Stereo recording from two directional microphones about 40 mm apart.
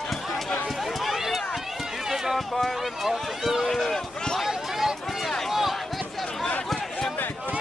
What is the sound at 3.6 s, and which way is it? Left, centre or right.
Run, centre.